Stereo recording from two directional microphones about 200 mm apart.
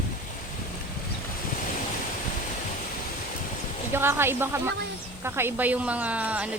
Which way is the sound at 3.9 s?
10° right (ahead or behind).